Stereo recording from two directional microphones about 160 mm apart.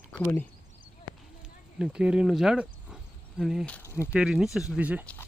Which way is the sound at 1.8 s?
5° right (ahead or behind).